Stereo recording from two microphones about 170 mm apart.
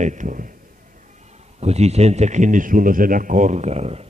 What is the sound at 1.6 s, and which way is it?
A man's voice, 40° right (ahead or behind).